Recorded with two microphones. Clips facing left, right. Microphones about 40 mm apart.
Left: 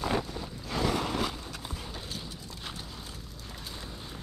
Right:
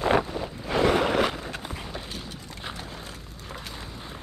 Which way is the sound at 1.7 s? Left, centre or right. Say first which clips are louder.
Right 4 dB; right.